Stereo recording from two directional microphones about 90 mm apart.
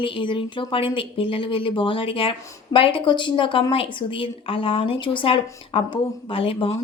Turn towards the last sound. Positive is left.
turn(degrees=90)